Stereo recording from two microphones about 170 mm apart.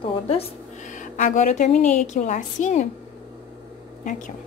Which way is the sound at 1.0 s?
50° left (ahead or behind).